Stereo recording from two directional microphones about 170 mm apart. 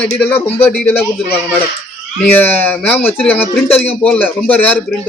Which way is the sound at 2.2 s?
10° left (ahead or behind).